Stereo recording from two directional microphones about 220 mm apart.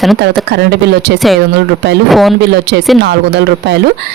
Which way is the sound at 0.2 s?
50° right (ahead or behind).